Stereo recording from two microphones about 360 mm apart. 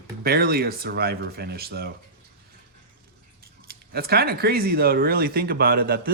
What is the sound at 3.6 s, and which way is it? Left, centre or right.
Speech, right.